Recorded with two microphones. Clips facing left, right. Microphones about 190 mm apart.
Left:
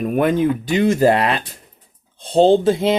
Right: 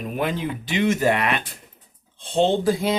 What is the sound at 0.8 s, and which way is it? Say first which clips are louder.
Speech: left 5 dB; 35° left (ahead or behind).